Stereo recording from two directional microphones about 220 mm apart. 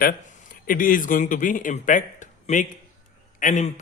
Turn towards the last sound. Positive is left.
turn(degrees=35)  # may be behind; listen again after turning